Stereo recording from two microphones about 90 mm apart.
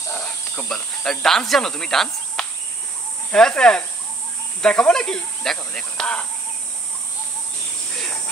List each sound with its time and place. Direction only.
0.1 s cricket: 20° left (ahead or behind)
0.7 s insect: 10° left (ahead or behind)
3.3 s speech: 10° left (ahead or behind)
7.9 s a sound: 5° left (ahead or behind)